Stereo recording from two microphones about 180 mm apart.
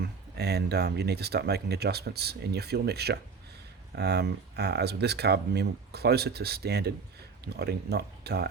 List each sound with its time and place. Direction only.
0.0 s speech: 65° right (ahead or behind)